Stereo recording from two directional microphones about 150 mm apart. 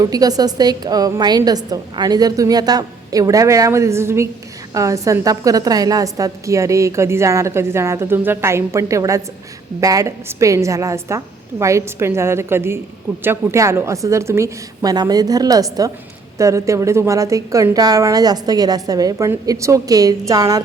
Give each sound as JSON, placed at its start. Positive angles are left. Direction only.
{"t": 0.0, "sound": "a woman's voice", "side_deg": -25}